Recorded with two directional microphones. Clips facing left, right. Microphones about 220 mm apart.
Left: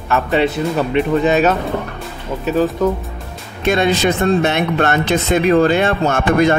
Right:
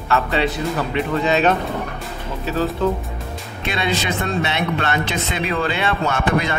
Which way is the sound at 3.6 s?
45° left (ahead or behind).